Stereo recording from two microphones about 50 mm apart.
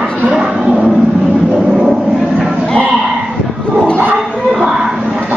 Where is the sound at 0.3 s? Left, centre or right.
Centre.